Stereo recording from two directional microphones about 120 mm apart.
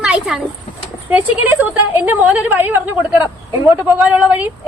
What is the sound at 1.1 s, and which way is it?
A woman's voice, 15° right (ahead or behind).